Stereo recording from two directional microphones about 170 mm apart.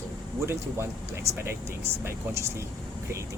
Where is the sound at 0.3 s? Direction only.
15° right (ahead or behind).